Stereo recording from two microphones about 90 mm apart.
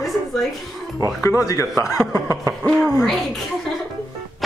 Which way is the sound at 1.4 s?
40° left (ahead or behind).